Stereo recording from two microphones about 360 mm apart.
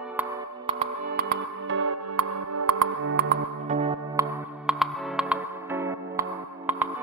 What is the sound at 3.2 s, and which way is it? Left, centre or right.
Music, right.